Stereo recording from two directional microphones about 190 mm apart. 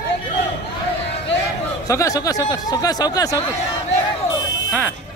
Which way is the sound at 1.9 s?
15° left (ahead or behind).